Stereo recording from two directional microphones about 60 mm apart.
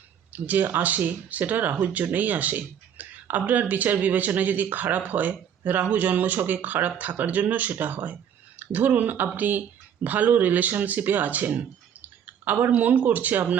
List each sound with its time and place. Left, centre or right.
0.3 s speech: right